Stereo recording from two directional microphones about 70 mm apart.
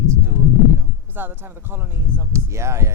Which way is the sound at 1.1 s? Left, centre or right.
Right.